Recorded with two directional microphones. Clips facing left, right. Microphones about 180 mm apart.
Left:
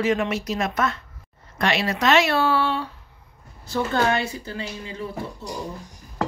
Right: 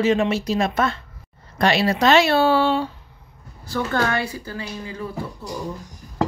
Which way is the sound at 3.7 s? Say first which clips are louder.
Left 1 dB; 25° left (ahead or behind).